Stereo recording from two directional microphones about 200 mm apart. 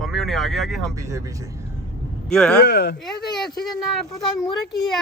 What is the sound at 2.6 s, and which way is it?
Speech, 55° left (ahead or behind).